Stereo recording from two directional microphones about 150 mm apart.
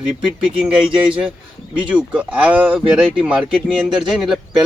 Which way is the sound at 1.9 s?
5° right (ahead or behind).